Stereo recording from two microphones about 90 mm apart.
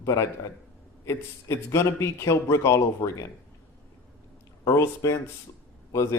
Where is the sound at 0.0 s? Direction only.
35° left (ahead or behind).